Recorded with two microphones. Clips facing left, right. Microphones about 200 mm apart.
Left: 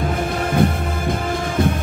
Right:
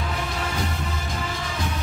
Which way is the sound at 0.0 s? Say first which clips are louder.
Left 8 dB; 50° left (ahead or behind).